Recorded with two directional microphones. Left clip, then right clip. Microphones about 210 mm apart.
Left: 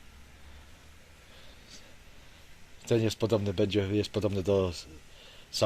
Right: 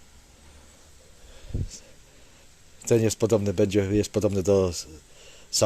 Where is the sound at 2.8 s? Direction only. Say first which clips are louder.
Right 6 dB; 35° right (ahead or behind).